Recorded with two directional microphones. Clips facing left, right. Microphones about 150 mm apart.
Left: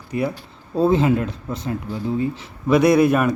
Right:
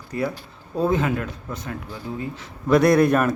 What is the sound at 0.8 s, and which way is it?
Speech, 30° left (ahead or behind).